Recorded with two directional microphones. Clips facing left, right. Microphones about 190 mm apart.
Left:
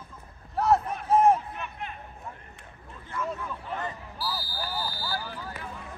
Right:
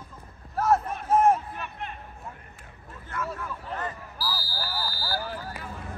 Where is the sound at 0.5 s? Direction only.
Centre (ahead or behind).